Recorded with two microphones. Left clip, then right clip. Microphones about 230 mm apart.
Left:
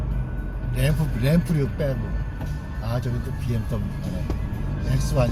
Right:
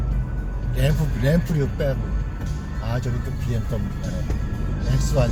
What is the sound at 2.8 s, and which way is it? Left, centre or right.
Speech, centre.